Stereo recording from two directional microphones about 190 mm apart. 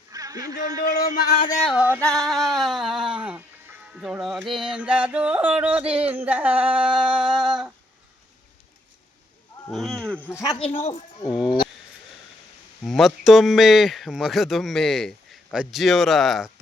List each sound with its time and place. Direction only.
0.1 s a man's voice: 20° right (ahead or behind)
0.8 s speech: 55° left (ahead or behind)
1.7 s music: 10° right (ahead or behind)
2.0 s speech: centre (ahead or behind)
3.9 s music: 5° right (ahead or behind)
9.6 s a sound: centre (ahead or behind)
11.3 s speech: centre (ahead or behind)
12.8 s speech: centre (ahead or behind)